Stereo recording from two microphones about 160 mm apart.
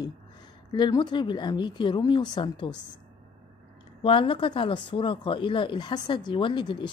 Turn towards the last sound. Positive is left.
turn(degrees=30)  # may be behind; listen again after turning